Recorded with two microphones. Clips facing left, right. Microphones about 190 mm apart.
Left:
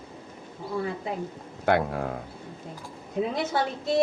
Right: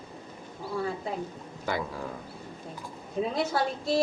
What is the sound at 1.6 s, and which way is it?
Speech, 60° left (ahead or behind).